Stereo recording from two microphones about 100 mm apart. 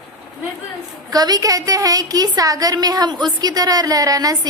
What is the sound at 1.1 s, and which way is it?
A woman's voice, 40° right (ahead or behind).